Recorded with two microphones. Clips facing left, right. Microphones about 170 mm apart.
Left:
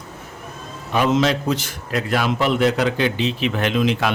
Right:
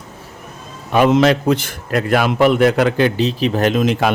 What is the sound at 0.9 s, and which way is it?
Speech, 60° right (ahead or behind).